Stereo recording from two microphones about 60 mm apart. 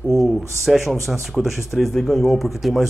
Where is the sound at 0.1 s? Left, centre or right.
Centre.